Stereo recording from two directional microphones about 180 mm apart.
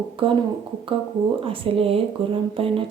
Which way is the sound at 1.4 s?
30° right (ahead or behind).